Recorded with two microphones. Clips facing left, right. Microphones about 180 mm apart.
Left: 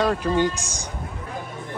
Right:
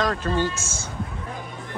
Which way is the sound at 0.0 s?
10° left (ahead or behind).